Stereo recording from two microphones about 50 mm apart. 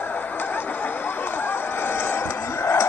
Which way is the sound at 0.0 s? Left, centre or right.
Left.